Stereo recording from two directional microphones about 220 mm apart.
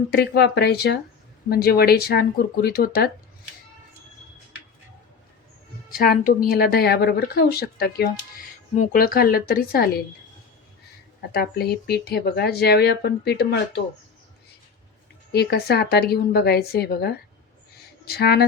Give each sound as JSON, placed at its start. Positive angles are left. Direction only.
{"t": 0.1, "sound": "speech", "side_deg": 50}
{"t": 5.9, "sound": "speech", "side_deg": 40}
{"t": 11.2, "sound": "speech", "side_deg": 45}
{"t": 15.3, "sound": "speech", "side_deg": 45}